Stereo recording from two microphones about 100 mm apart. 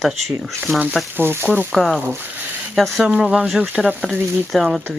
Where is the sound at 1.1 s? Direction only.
20° right (ahead or behind).